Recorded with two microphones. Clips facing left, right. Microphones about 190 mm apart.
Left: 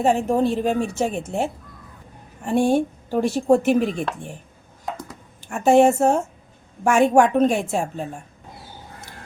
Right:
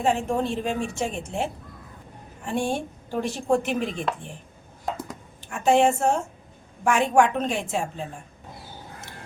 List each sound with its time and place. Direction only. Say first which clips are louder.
0.0 s a woman's voice: left 5 dB; 40° left (ahead or behind)
2.4 s a woman's voice: left 8 dB; 40° left (ahead or behind)
5.5 s a woman's voice: left 5 dB; 45° left (ahead or behind)